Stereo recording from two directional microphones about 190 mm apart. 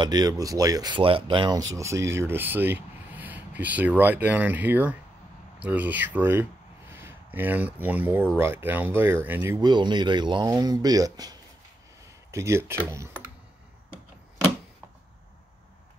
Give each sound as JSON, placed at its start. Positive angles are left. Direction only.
{"t": 0.0, "sound": "speech", "side_deg": -20}
{"t": 1.8, "sound": "speech", "side_deg": -15}